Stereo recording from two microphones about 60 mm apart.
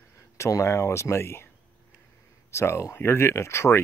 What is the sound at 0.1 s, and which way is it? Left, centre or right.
Speech, left.